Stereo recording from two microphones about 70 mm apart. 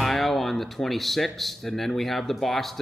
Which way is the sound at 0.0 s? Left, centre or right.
Centre.